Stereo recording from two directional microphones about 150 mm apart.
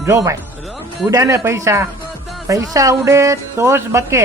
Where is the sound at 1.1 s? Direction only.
20° right (ahead or behind).